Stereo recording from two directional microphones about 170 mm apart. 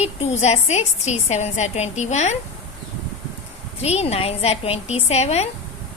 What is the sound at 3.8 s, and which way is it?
A woman's voice, 40° left (ahead or behind).